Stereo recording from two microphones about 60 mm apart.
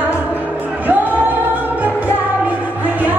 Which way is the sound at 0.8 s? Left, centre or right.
Right.